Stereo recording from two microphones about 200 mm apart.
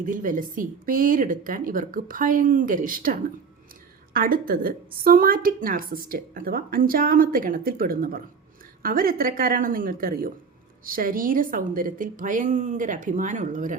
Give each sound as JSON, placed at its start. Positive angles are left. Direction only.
{"t": 0.0, "sound": "a woman's voice", "side_deg": -40}